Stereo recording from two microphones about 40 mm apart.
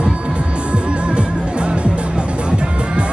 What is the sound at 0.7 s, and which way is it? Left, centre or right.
Music, right.